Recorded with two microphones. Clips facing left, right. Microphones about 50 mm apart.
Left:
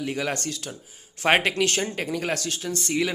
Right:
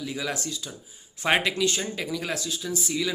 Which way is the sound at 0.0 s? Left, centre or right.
Left.